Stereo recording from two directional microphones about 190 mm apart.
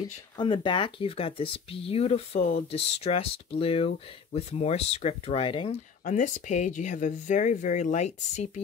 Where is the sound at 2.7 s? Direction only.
30° left (ahead or behind).